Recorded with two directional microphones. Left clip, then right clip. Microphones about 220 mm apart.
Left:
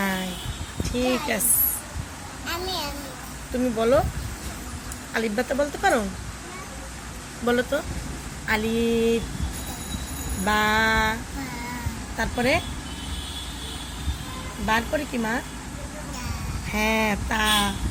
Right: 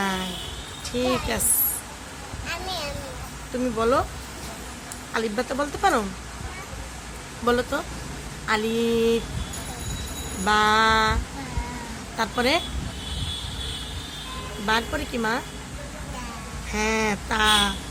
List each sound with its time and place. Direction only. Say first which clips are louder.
0.9 s speech: even; 5° right (ahead or behind)
2.5 s a sound: left 1 dB; 15° right (ahead or behind)
3.8 s speech: left 1 dB; 5° right (ahead or behind)
5.1 s speech: left 1 dB; 5° right (ahead or behind)
7.4 s speech: even; 10° right (ahead or behind)
10.4 s speech: right 2 dB; 10° right (ahead or behind)
14.7 s speech: left 1 dB; 10° right (ahead or behind)
16.7 s speech: left 1 dB; 5° right (ahead or behind)